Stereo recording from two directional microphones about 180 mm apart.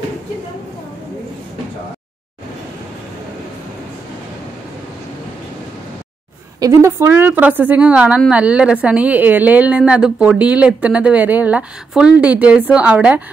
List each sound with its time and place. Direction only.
6.6 s speech: 15° right (ahead or behind)